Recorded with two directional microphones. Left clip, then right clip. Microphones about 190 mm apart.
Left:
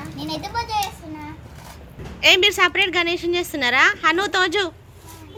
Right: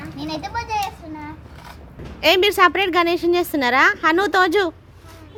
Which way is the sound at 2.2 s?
30° right (ahead or behind).